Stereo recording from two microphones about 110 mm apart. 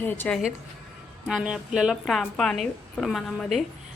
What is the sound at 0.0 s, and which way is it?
Speech, 20° left (ahead or behind).